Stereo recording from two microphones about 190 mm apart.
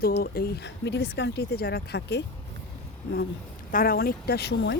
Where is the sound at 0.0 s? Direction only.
55° left (ahead or behind).